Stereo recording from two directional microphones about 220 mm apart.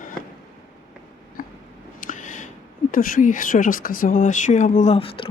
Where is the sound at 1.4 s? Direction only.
40° left (ahead or behind).